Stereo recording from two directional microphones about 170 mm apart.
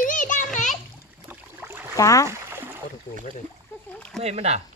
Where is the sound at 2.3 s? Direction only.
15° right (ahead or behind).